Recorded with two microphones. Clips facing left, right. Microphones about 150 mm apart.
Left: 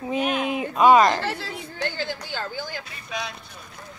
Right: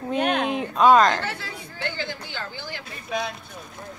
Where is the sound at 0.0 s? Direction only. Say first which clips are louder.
Right 1 dB; 5° left (ahead or behind).